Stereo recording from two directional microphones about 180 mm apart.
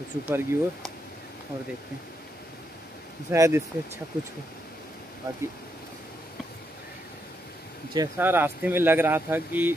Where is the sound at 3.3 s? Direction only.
15° right (ahead or behind).